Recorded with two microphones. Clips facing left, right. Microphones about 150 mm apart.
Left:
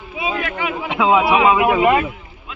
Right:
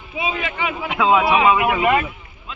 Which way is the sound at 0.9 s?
20° left (ahead or behind).